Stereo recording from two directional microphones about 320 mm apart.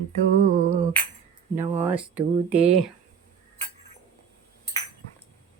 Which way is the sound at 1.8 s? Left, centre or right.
Centre.